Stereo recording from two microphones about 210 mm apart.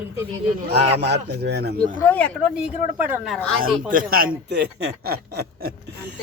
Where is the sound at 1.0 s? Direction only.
55° right (ahead or behind).